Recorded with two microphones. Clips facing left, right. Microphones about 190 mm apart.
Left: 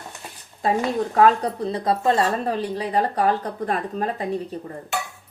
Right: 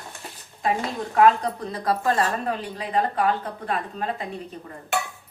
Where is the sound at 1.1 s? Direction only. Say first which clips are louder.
Right 1 dB; 30° left (ahead or behind).